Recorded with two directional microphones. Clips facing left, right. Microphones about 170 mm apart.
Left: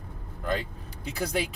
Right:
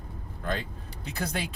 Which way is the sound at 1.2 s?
10° left (ahead or behind).